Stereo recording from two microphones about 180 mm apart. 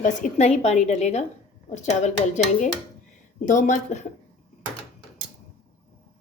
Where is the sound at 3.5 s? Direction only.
45° left (ahead or behind).